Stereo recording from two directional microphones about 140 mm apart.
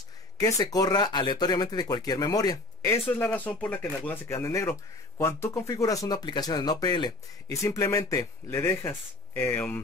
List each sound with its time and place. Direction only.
0.4 s speech: 25° left (ahead or behind)